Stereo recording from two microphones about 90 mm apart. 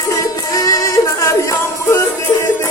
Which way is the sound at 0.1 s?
40° left (ahead or behind).